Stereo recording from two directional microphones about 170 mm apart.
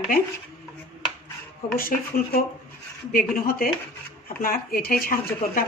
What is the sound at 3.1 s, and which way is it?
Speech, 55° left (ahead or behind).